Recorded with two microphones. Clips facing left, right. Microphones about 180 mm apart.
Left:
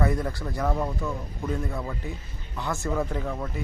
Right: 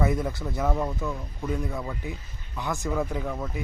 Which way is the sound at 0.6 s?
Centre (ahead or behind).